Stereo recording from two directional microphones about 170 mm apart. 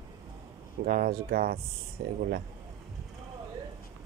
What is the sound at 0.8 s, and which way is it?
Speech, 55° right (ahead or behind).